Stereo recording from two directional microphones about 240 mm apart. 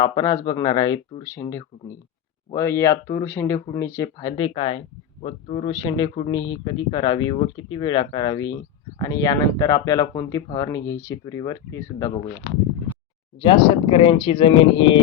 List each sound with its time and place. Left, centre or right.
0.0 s speech: centre
13.4 s speech: left